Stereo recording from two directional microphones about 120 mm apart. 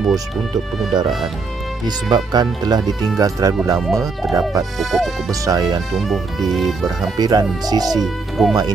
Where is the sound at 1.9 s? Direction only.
35° right (ahead or behind).